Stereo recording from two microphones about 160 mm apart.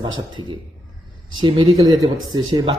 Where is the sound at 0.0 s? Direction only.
30° right (ahead or behind).